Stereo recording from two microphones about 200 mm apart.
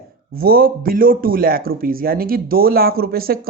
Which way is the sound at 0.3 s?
50° right (ahead or behind).